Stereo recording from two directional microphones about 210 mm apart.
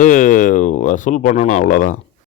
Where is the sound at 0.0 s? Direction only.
35° left (ahead or behind).